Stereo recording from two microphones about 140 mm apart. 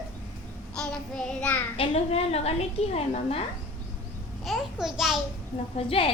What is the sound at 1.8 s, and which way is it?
A woman's voice, 45° left (ahead or behind).